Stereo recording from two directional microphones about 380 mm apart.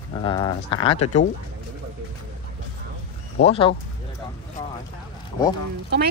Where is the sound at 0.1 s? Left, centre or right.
Centre.